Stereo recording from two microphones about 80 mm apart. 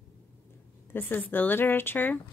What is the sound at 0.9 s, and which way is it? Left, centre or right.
Speech, left.